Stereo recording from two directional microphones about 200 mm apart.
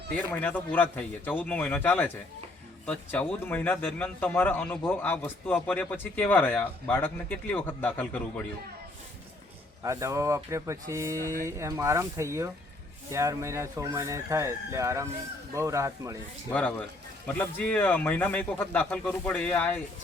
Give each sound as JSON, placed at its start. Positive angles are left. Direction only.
{"t": 0.2, "sound": "speech", "side_deg": 10}
{"t": 9.8, "sound": "speech", "side_deg": -15}
{"t": 16.5, "sound": "speech", "side_deg": 10}